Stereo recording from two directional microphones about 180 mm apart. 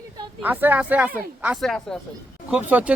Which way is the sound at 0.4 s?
10° right (ahead or behind).